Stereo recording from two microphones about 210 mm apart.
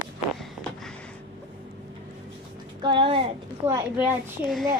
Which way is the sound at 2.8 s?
20° right (ahead or behind).